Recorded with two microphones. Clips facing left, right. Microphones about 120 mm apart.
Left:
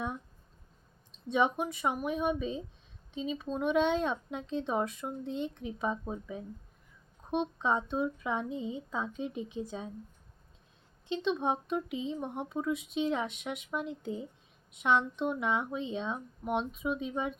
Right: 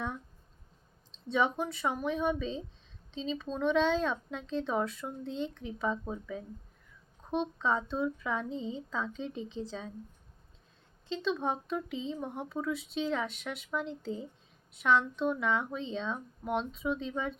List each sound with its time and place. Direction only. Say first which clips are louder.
1.3 s speech: left 1 dB; 20° left (ahead or behind)
11.2 s speech: left 1 dB; 20° left (ahead or behind)